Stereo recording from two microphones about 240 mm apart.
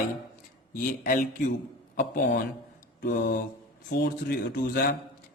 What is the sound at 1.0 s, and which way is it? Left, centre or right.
Speech, left.